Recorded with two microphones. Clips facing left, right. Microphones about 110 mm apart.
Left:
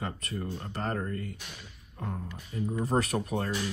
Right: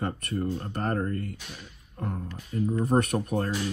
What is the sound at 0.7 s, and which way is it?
Speech, 45° right (ahead or behind).